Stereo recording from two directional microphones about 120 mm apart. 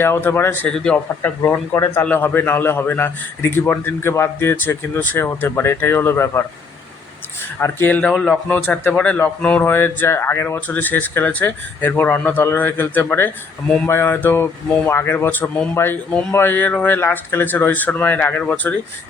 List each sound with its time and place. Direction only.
0.0 s speech: 20° left (ahead or behind)
0.7 s speech: 5° left (ahead or behind)
1.5 s a man's voice: 20° left (ahead or behind)
7.6 s a man's voice: 15° left (ahead or behind)